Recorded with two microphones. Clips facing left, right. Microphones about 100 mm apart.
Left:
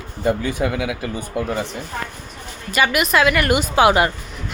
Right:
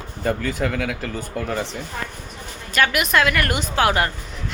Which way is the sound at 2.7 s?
5° left (ahead or behind).